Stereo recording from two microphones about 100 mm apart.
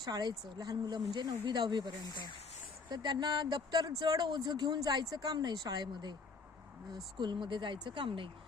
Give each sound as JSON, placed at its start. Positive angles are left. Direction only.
{"t": 0.0, "sound": "speech", "side_deg": -45}
{"t": 2.0, "sound": "speech", "side_deg": 45}
{"t": 2.9, "sound": "speech", "side_deg": -45}